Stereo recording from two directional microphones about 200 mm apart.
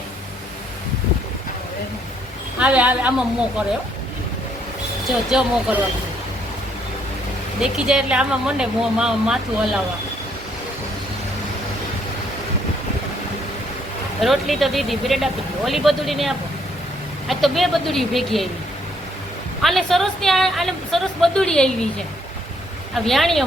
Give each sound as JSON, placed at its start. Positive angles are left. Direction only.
{"t": 2.6, "sound": "a woman's voice", "side_deg": -5}
{"t": 5.3, "sound": "speech", "side_deg": -5}
{"t": 7.6, "sound": "speech", "side_deg": -5}
{"t": 14.2, "sound": "speech", "side_deg": 0}
{"t": 19.6, "sound": "speech", "side_deg": 0}
{"t": 23.0, "sound": "speech", "side_deg": 0}